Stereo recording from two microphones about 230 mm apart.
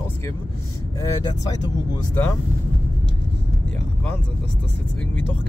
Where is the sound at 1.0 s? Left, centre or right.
Centre.